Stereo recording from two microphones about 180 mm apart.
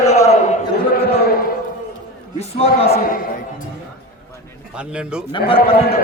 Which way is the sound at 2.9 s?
55° left (ahead or behind).